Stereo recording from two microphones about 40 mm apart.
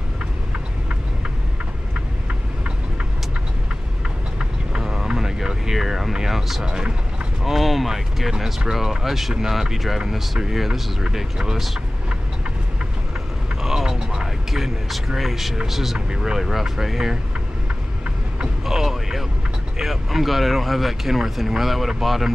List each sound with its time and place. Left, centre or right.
4.4 s vehicle: centre
6.6 s speech: centre
7.4 s a sound: centre
8.3 s speech: centre
13.6 s vehicle: centre
13.9 s vehicle: right
14.5 s a man's voice: centre
18.7 s speech: centre